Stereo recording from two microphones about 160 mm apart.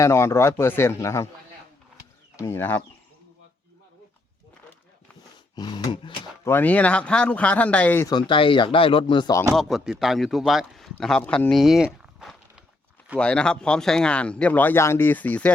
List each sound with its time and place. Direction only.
0.0 s speech: 15° left (ahead or behind)
2.3 s speech: 15° left (ahead or behind)
5.5 s speech: 25° left (ahead or behind)
6.4 s speech: 10° left (ahead or behind)
8.1 s speech: 30° left (ahead or behind)
9.6 s speech: centre (ahead or behind)